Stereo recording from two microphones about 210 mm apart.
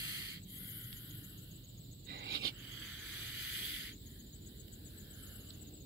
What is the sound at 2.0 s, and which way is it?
Frog, 50° right (ahead or behind).